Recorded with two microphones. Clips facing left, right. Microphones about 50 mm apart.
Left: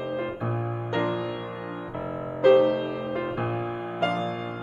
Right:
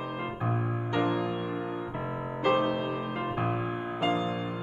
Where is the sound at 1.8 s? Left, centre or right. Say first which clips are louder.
Left 2 dB; centre.